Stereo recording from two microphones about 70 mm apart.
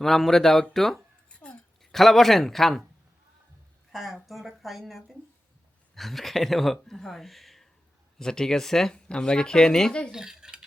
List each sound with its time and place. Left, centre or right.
0.0 s speech: centre
1.3 s hiccup: centre
1.8 s speech: centre
3.9 s speech: centre
10.1 s cutlery: centre